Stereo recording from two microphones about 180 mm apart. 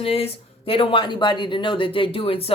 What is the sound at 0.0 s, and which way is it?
Speech, 35° left (ahead or behind).